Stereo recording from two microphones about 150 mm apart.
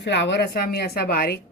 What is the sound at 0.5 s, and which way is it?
Speech, 90° left.